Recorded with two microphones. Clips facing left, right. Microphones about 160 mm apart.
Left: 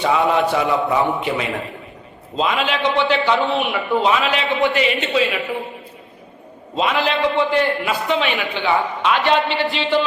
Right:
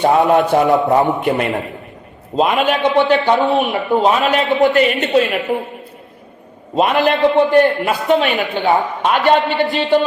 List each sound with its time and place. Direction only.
0.0 s a man's voice: 50° right (ahead or behind)
6.7 s a man's voice: 55° right (ahead or behind)